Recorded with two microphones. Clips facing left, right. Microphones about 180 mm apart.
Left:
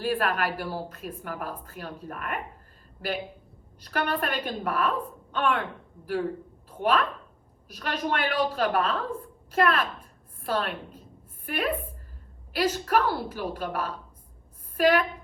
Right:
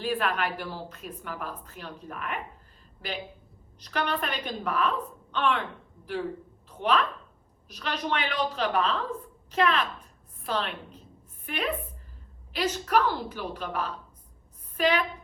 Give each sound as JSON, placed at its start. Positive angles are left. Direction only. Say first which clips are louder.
{"t": 0.0, "sound": "a woman's voice", "louder": "left 2 dB", "side_deg": 45}
{"t": 3.8, "sound": "a woman's voice", "louder": "left 2 dB", "side_deg": 50}